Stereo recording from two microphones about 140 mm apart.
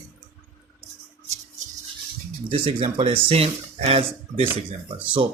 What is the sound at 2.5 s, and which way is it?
Speech, 40° right (ahead or behind).